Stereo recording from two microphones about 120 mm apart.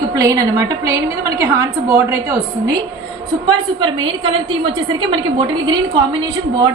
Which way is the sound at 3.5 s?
45° right (ahead or behind).